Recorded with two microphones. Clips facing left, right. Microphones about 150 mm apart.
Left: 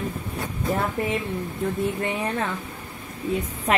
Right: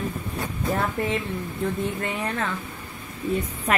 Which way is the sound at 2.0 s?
15° left (ahead or behind).